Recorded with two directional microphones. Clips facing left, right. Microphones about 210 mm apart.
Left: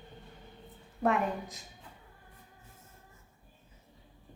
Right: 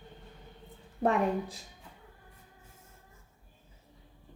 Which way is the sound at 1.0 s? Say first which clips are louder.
Right 2 dB; 30° right (ahead or behind).